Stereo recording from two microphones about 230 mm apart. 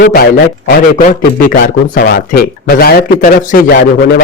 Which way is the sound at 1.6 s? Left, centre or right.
Left.